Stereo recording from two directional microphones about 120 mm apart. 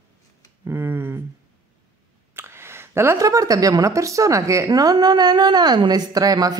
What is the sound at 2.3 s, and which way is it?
Speech, 20° right (ahead or behind).